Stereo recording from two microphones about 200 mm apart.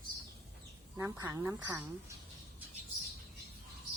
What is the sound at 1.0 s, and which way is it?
Speech, 10° right (ahead or behind).